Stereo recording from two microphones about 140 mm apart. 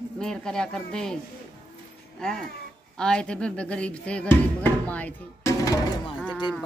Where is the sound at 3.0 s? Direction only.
5° left (ahead or behind).